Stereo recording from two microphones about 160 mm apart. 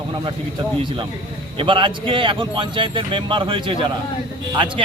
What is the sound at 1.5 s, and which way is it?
A man's voice, 30° right (ahead or behind).